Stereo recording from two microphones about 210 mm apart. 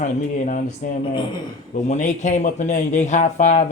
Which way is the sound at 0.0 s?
35° left (ahead or behind).